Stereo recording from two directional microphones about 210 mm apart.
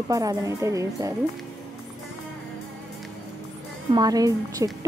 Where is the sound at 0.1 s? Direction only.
15° right (ahead or behind).